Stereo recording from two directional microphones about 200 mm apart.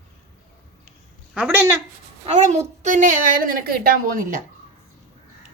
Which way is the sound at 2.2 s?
35° right (ahead or behind).